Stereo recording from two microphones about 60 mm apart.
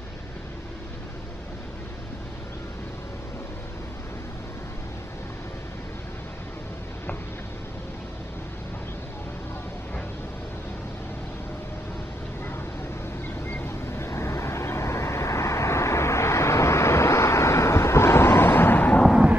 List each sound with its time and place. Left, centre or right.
13.5 s vehicle: left